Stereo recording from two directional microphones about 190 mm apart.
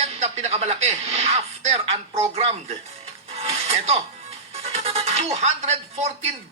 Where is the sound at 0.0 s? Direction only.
35° right (ahead or behind).